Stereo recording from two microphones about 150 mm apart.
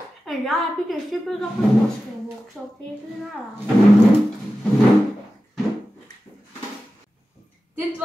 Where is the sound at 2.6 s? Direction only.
5° right (ahead or behind).